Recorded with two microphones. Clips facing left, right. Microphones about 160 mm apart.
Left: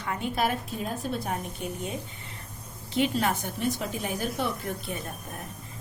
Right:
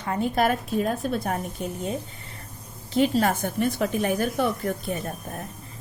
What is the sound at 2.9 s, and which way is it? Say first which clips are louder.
A woman's voice: right 5 dB; 45° right (ahead or behind).